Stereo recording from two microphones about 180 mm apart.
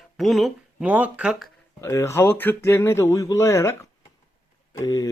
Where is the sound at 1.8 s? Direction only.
15° left (ahead or behind).